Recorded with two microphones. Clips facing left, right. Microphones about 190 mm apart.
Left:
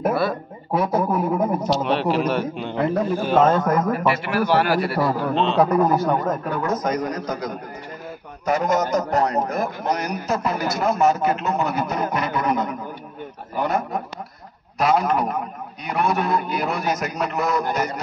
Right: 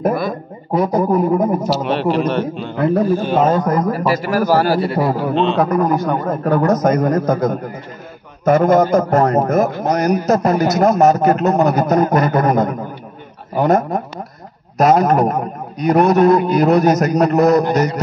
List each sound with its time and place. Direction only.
0.1 s a man's voice: 15° right (ahead or behind)
0.7 s a man's voice: 5° left (ahead or behind)
2.5 s a man's voice: 15° left (ahead or behind)
3.2 s a man's voice: centre (ahead or behind)
3.4 s a man's voice: 10° right (ahead or behind)
3.9 s a man's voice: 35° right (ahead or behind)
4.9 s a man's voice: 15° right (ahead or behind)
5.3 s a man's voice: centre (ahead or behind)
6.8 s a man's voice: 50° right (ahead or behind)